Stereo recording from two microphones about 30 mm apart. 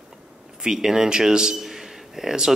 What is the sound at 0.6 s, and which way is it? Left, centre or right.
Speech, centre.